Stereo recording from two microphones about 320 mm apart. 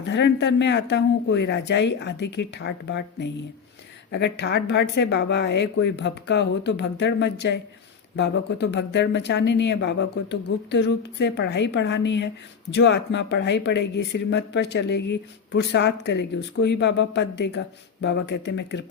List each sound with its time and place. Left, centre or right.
0.1 s speech: left